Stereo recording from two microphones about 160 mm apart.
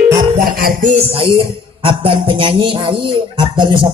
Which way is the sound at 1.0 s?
35° right (ahead or behind).